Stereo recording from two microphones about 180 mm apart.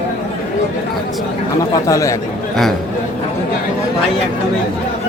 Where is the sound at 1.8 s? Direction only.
20° left (ahead or behind).